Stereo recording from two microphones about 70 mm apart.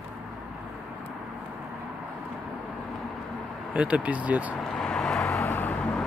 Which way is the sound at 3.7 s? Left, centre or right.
Centre.